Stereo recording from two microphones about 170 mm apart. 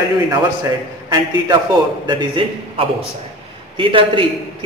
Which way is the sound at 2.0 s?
30° right (ahead or behind).